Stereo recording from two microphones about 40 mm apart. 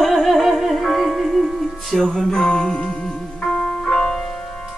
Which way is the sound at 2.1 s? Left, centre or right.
Centre.